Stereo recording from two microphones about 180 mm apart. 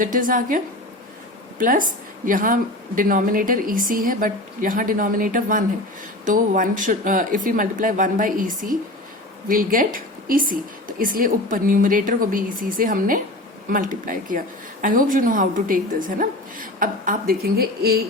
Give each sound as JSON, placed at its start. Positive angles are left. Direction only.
{"t": 0.0, "sound": "speech", "side_deg": -50}